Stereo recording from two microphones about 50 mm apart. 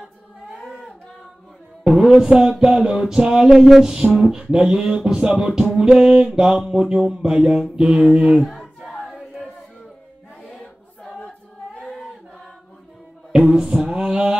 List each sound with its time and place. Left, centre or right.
1.9 s music: centre
8.4 s choir: centre
10.4 s choir: centre
11.1 s choir: left
13.3 s music: centre
13.7 s a sound: centre